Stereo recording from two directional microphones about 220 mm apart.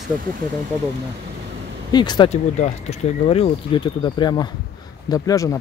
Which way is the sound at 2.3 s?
30° left (ahead or behind).